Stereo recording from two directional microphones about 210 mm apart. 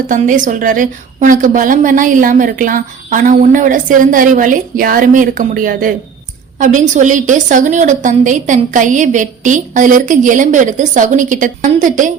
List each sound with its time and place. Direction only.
0.1 s a woman's voice: 40° right (ahead or behind)